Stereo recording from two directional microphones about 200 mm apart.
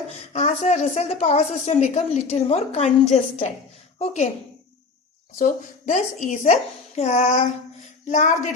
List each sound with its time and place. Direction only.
0.3 s a woman's voice: 35° left (ahead or behind)
5.4 s a woman's voice: 40° left (ahead or behind)